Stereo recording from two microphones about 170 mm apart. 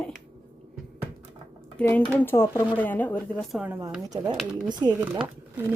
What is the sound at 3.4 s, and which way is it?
Speech, 5° right (ahead or behind).